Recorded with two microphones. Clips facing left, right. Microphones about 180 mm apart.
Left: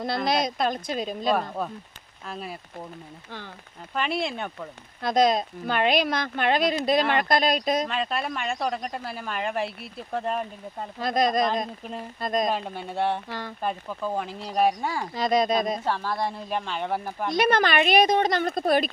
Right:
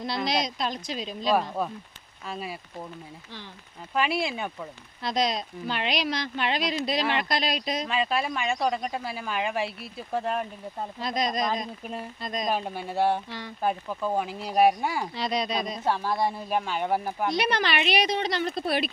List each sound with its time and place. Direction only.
0.3 s speech: 55° left (ahead or behind)
1.3 s speech: centre (ahead or behind)
3.9 s speech: 5° right (ahead or behind)
5.0 s speech: 50° left (ahead or behind)
7.9 s speech: centre (ahead or behind)
11.0 s speech: 50° left (ahead or behind)
12.5 s speech: 5° right (ahead or behind)
15.1 s speech: 45° left (ahead or behind)
15.8 s speech: 15° right (ahead or behind)
17.3 s speech: 50° left (ahead or behind)